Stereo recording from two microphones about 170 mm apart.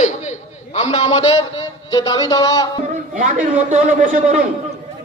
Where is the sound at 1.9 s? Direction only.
20° left (ahead or behind).